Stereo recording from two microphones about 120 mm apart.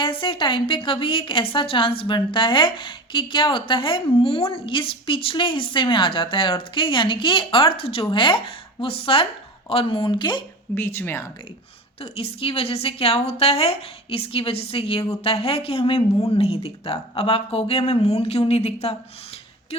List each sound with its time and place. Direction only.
0.0 s a woman's voice: 45° left (ahead or behind)
10.8 s speech: 20° left (ahead or behind)
11.9 s a woman's voice: 55° left (ahead or behind)